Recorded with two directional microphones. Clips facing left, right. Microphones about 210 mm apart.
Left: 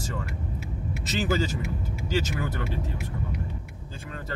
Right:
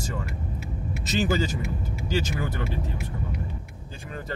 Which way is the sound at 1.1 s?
15° right (ahead or behind).